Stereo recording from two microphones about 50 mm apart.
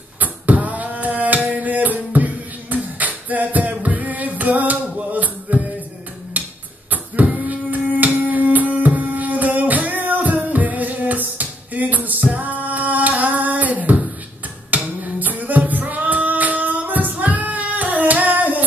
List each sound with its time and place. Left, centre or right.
0.2 s music: right
6.4 s tick-tock: right
6.9 s a sound: right
8.0 s music: right
15.1 s female singing: right